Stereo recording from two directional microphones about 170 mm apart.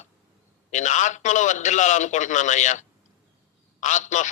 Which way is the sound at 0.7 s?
45° left (ahead or behind).